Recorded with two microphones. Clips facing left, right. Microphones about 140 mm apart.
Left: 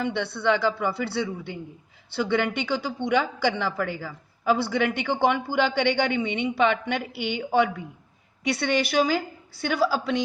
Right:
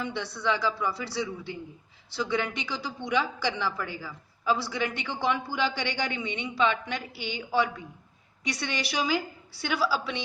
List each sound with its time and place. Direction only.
0.0 s a woman's voice: 60° left (ahead or behind)